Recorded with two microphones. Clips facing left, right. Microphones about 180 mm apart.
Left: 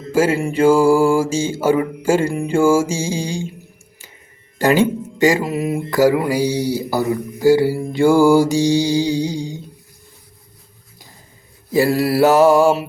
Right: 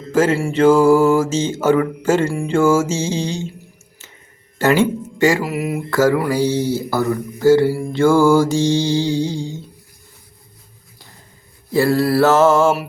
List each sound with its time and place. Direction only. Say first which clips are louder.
0.1 s speech: even; 10° left (ahead or behind)
4.5 s speech: even; 15° left (ahead or behind)
5.9 s speech: left 1 dB; 15° left (ahead or behind)
11.7 s speech: even; 15° left (ahead or behind)